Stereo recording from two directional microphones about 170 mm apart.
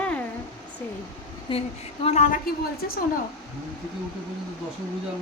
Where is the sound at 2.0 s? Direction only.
40° left (ahead or behind).